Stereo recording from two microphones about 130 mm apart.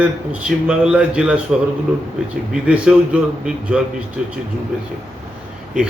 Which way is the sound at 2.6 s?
10° right (ahead or behind).